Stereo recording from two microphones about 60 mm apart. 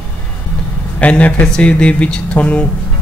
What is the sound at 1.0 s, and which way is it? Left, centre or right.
Speech, left.